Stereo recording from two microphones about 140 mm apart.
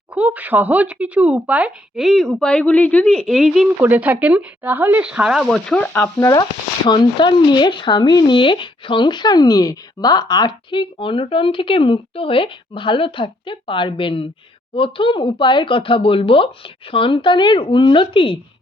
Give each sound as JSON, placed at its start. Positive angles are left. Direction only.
{"t": 0.1, "sound": "speech", "side_deg": -10}
{"t": 3.8, "sound": "speech", "side_deg": -15}
{"t": 5.5, "sound": "speech", "side_deg": 5}
{"t": 6.1, "sound": "speech", "side_deg": 25}